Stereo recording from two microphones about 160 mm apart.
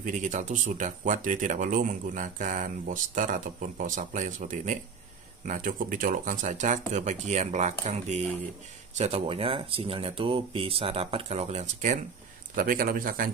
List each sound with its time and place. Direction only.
0.0 s speech: 50° right (ahead or behind)
12.5 s a man's voice: 65° right (ahead or behind)